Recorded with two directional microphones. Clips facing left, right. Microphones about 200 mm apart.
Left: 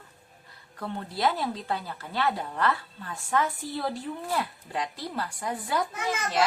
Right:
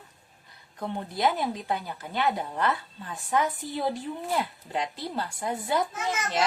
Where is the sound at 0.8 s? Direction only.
15° right (ahead or behind).